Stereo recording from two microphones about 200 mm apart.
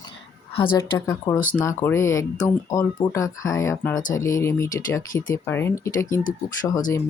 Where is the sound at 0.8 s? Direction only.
15° left (ahead or behind).